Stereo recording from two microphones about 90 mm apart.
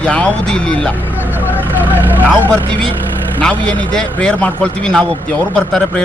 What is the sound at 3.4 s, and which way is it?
Speech, 15° left (ahead or behind).